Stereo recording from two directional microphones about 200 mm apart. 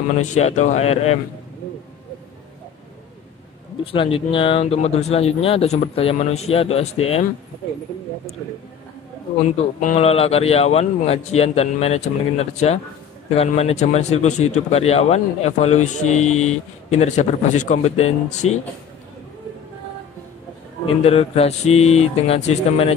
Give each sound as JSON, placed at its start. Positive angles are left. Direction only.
{"t": 0.2, "sound": "speech", "side_deg": 35}
{"t": 3.8, "sound": "speech", "side_deg": 25}
{"t": 9.8, "sound": "speech", "side_deg": 35}
{"t": 20.8, "sound": "speech", "side_deg": 30}